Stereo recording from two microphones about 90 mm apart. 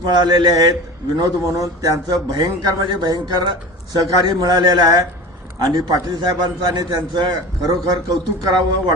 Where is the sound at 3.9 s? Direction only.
50° right (ahead or behind).